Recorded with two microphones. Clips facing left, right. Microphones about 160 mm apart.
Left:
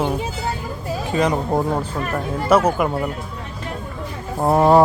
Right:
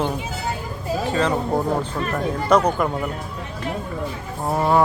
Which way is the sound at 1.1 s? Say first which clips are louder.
Left 3 dB; 15° left (ahead or behind).